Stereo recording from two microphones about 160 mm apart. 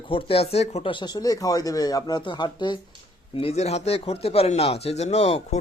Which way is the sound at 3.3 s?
40° left (ahead or behind).